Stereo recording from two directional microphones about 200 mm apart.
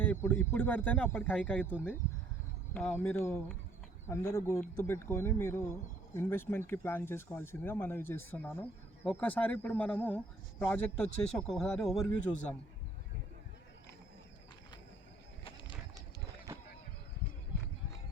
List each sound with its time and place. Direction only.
0.0 s speech: 10° left (ahead or behind)
2.7 s speech: 10° left (ahead or behind)
12.2 s a man's voice: 35° left (ahead or behind)
15.4 s bird: 25° left (ahead or behind)